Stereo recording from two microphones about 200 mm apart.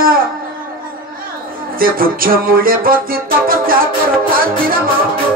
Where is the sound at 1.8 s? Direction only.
45° right (ahead or behind).